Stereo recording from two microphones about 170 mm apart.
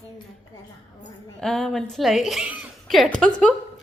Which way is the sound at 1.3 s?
5° left (ahead or behind).